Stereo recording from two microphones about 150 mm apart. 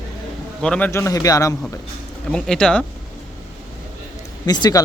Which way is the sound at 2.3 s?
5° left (ahead or behind).